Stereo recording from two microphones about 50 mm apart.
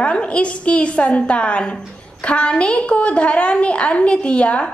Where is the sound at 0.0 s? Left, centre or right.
Left.